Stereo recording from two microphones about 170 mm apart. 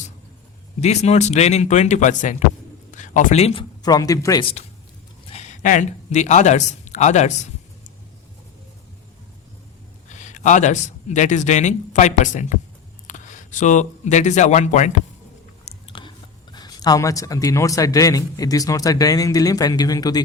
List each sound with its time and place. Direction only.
0.8 s speech: 40° left (ahead or behind); by 4.4 s 20° left (ahead or behind)
5.3 s speech: 45° left (ahead or behind)
10.1 s a man's voice: 45° left (ahead or behind)
15.6 s speech: 30° left (ahead or behind)